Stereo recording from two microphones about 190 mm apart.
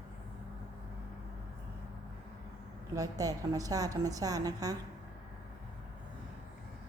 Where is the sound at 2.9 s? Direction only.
20° right (ahead or behind).